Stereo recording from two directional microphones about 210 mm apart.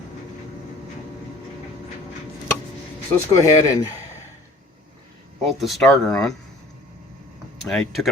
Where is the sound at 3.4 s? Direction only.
15° left (ahead or behind).